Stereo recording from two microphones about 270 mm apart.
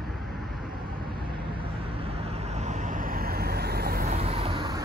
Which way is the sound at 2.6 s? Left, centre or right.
Right.